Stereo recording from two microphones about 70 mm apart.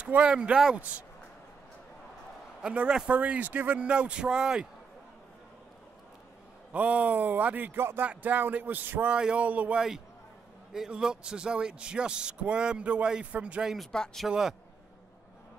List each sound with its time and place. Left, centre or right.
0.0 s a man's voice: centre
2.6 s speech: centre
6.7 s a man's voice: centre
9.1 s speech: centre
9.8 s speech: centre
13.9 s speech: centre
14.2 s a man's voice: centre